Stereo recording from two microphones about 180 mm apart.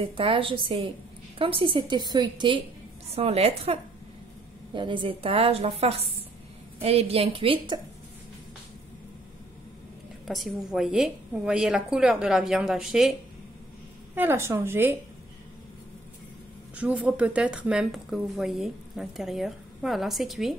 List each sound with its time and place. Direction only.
0.0 s a woman's voice: 30° right (ahead or behind)
10.2 s a woman's voice: centre (ahead or behind)
14.1 s a woman's voice: 10° right (ahead or behind)
16.7 s a woman's voice: 10° right (ahead or behind)